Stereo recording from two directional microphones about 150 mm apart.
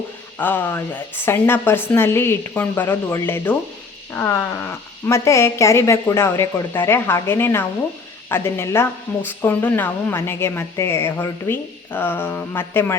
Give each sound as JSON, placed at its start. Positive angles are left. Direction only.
{"t": 0.3, "sound": "a woman's voice", "side_deg": 10}